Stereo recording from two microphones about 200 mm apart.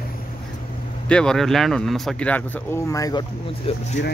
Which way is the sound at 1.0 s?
5° left (ahead or behind).